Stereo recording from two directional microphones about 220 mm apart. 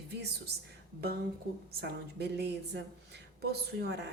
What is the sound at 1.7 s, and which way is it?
A woman's voice, 45° right (ahead or behind).